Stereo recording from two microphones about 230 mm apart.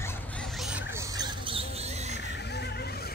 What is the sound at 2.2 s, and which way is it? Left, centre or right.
Neigh, left.